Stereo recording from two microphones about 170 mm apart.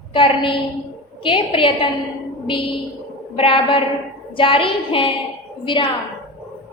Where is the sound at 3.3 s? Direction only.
30° left (ahead or behind).